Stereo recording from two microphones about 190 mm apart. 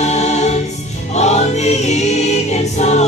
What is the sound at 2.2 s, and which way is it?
Choir, 35° left (ahead or behind).